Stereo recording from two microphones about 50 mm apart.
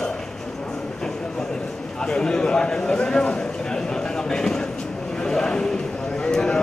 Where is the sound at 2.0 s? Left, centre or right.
Centre.